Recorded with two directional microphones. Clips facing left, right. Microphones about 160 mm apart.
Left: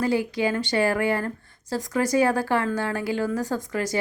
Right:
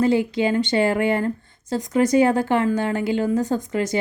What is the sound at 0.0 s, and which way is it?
A woman's voice, 25° right (ahead or behind).